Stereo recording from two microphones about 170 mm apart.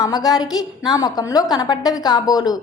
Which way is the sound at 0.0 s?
20° left (ahead or behind).